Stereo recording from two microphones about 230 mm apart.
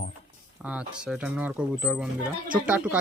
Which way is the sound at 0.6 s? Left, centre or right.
Centre.